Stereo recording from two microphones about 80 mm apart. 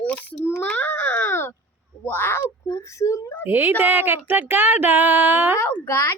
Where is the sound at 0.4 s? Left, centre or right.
Left.